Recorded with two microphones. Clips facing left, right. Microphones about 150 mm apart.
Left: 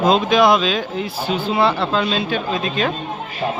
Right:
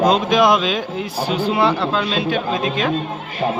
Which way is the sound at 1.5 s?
10° right (ahead or behind).